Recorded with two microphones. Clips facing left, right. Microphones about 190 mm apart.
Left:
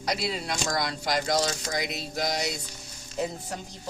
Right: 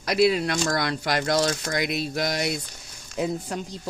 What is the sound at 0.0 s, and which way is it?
Speech, 65° right (ahead or behind).